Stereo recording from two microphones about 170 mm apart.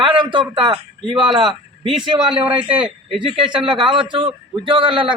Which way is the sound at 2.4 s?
10° right (ahead or behind).